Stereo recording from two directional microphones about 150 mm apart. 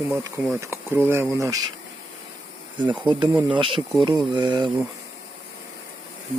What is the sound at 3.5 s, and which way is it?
Speech, 35° right (ahead or behind).